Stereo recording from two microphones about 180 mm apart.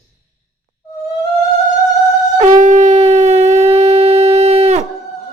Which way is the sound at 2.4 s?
40° right (ahead or behind).